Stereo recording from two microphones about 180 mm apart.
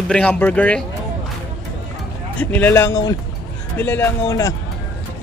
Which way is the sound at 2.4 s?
10° left (ahead or behind).